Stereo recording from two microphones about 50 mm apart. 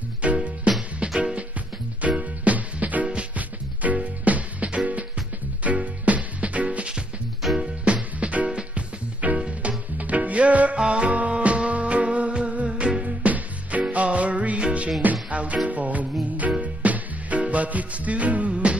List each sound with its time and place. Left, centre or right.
0.2 s music: right
2.0 s music: right